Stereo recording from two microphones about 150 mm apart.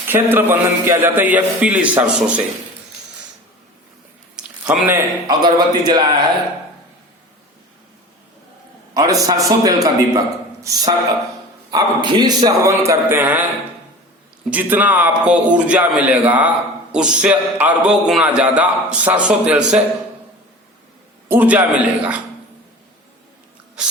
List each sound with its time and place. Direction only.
0.1 s a man's voice: 15° right (ahead or behind)
4.4 s a sound: 10° right (ahead or behind)
5.3 s speech: 30° right (ahead or behind)
9.0 s a man's voice: 25° right (ahead or behind)
14.5 s a man's voice: 10° right (ahead or behind)
21.2 s a man's voice: 10° right (ahead or behind)